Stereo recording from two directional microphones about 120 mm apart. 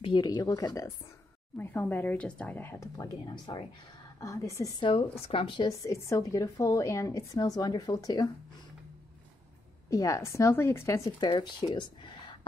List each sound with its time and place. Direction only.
0.0 s speech: 40° left (ahead or behind)
1.6 s a woman's voice: 15° left (ahead or behind); by 3.6 s 35° left (ahead or behind)
4.2 s speech: 25° left (ahead or behind)
4.7 s speech: 40° left (ahead or behind)
5.7 s speech: 25° left (ahead or behind)
9.8 s speech: 25° left (ahead or behind)